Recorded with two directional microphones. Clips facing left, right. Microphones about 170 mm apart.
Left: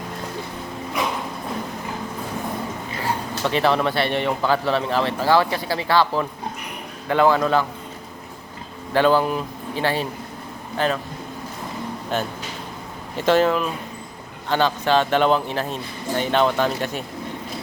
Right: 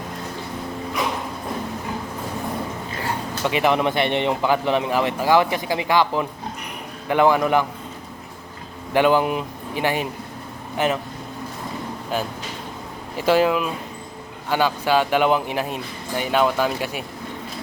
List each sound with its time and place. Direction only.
3.4 s speech: 15° right (ahead or behind)
8.9 s a man's voice: 15° right (ahead or behind)
12.1 s speech: 10° right (ahead or behind)